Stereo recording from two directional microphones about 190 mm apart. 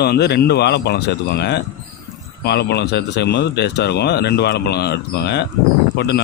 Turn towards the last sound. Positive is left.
turn(degrees=60)  # may be behind; listen again after turning